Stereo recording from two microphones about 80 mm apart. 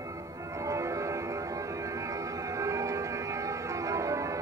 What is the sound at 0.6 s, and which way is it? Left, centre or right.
Music, right.